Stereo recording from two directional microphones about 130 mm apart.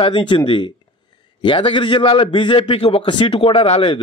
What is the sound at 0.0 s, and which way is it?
A man's voice, 40° left (ahead or behind).